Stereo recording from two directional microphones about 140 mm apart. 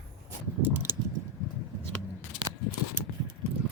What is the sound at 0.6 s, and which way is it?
Speech, 15° right (ahead or behind).